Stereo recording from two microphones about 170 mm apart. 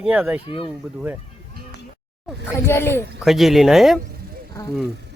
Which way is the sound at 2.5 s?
15° left (ahead or behind).